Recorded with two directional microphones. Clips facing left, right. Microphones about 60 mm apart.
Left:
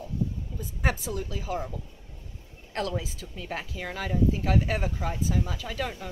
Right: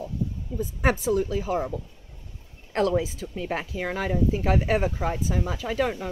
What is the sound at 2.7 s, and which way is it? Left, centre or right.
Speech, right.